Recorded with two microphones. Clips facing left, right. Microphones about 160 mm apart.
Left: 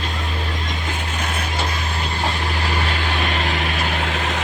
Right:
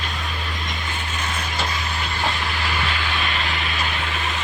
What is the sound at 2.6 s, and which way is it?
Vehicle, 40° left (ahead or behind).